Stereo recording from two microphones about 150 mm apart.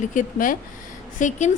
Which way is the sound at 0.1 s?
60° left (ahead or behind).